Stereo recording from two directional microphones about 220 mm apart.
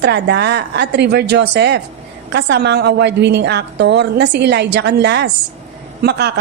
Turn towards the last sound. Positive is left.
turn(degrees=-50)  # may be behind; listen again after turning